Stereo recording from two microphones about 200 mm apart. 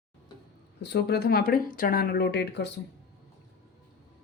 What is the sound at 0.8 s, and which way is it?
Speech, 55° left (ahead or behind).